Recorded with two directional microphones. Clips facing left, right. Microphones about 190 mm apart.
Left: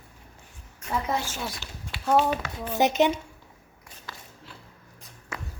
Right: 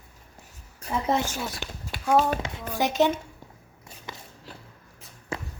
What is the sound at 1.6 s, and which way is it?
Speech, 60° right (ahead or behind).